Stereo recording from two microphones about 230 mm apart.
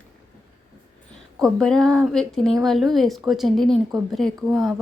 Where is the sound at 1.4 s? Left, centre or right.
Centre.